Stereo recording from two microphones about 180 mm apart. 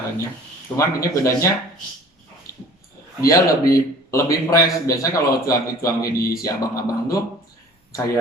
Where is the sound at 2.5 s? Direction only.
55° left (ahead or behind).